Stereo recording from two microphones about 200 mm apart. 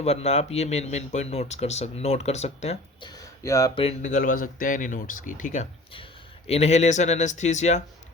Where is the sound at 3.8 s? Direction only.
35° left (ahead or behind).